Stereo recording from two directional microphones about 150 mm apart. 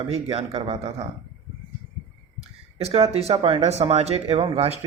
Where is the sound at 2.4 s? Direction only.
45° right (ahead or behind).